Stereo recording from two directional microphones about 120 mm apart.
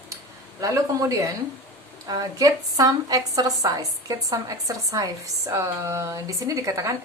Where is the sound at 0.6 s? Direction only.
30° right (ahead or behind).